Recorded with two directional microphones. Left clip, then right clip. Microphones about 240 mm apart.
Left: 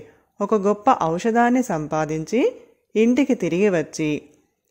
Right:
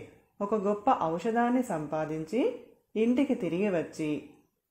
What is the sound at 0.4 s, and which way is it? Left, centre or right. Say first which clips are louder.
Speech: left 9 dB; left.